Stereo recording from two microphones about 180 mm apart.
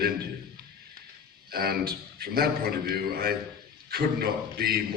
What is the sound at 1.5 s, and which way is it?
A man's voice, 60° right (ahead or behind).